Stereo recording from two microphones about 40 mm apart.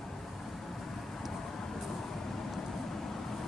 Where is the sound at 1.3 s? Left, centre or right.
Centre.